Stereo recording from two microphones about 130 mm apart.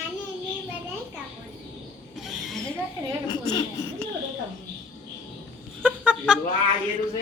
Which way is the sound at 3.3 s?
35° left (ahead or behind).